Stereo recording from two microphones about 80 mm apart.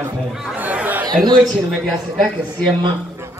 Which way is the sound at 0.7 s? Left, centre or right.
Right.